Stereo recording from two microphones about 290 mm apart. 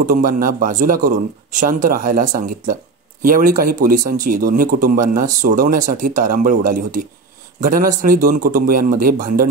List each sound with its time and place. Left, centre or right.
0.0 s speech: right